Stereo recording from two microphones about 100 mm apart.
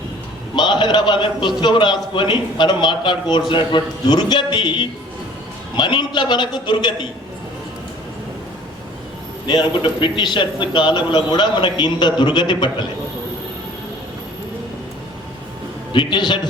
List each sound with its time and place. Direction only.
0.5 s a man's voice: 50° left (ahead or behind)
9.5 s a man's voice: 50° left (ahead or behind)
15.9 s a man's voice: 55° left (ahead or behind)